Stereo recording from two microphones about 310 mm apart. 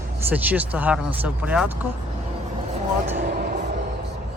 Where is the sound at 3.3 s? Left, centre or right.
Right.